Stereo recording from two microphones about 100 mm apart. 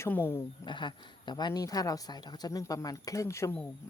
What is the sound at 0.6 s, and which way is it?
Speech, 50° left (ahead or behind).